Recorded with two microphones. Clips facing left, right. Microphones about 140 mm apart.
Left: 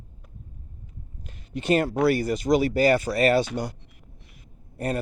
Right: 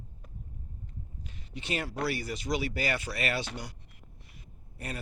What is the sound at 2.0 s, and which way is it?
Speech, 50° left (ahead or behind).